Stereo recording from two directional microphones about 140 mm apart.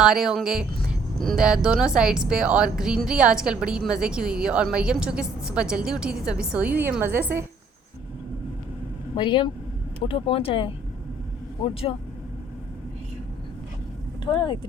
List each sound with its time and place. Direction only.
0.0 s a woman's voice: 5° right (ahead or behind)
9.1 s speech: 35° left (ahead or behind)
14.3 s speech: 35° left (ahead or behind)